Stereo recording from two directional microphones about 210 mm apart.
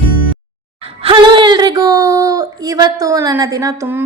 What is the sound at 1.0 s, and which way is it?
A woman's voice, 25° right (ahead or behind).